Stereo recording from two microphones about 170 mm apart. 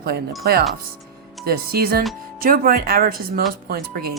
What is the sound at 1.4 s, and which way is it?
A woman's voice, 65° right (ahead or behind).